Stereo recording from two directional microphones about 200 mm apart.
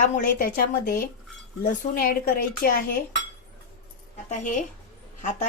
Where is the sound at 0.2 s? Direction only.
45° left (ahead or behind).